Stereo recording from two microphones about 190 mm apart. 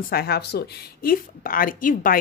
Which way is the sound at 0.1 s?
55° left (ahead or behind).